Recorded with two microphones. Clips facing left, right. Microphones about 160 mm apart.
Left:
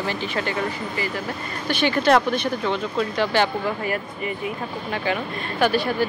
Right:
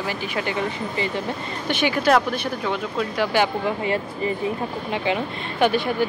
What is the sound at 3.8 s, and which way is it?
Speech, 30° right (ahead or behind).